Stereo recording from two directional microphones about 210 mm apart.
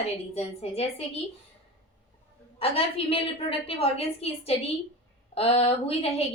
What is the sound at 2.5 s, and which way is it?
A woman's voice, 25° left (ahead or behind).